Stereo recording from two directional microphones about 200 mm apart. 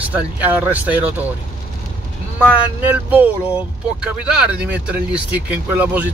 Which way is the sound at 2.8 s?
10° right (ahead or behind).